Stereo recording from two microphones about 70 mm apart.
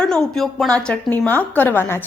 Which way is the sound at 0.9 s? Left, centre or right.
Left.